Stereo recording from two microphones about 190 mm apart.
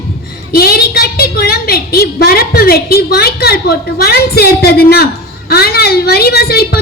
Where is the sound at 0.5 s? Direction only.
55° left (ahead or behind).